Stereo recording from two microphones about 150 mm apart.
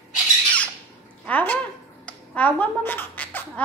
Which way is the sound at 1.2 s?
10° left (ahead or behind).